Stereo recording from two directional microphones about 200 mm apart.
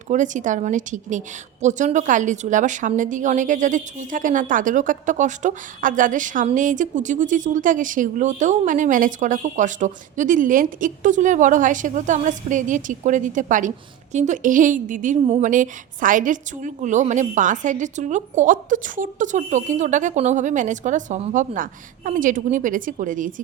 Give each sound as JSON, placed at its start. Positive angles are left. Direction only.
{"t": 0.1, "sound": "a woman's voice", "side_deg": -40}